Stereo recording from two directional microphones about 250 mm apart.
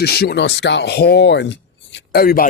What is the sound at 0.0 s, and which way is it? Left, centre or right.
Speech, left.